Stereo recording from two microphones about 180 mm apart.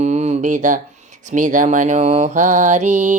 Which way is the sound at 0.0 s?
40° right (ahead or behind).